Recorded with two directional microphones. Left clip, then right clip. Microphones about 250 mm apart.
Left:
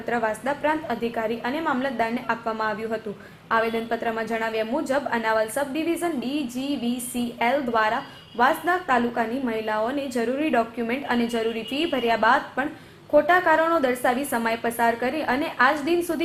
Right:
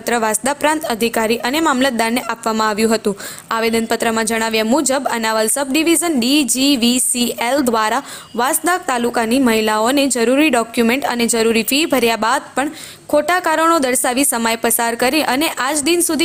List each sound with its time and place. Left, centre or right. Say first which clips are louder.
0.1 s a woman's voice: right 8 dB; right